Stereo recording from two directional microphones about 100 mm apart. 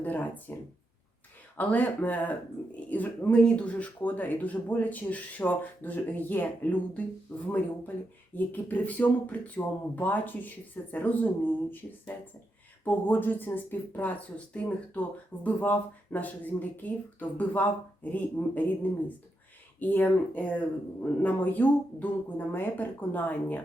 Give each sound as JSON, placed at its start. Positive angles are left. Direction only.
{"t": 0.0, "sound": "speech", "side_deg": 15}
{"t": 1.5, "sound": "speech", "side_deg": 15}